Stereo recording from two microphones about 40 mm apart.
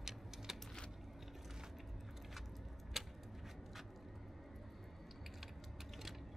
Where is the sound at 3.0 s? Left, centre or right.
Centre.